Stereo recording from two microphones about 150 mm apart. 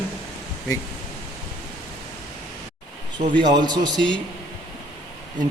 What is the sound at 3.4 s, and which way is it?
Speech, 30° right (ahead or behind).